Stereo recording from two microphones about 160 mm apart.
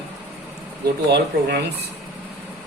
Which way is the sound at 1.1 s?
90° right.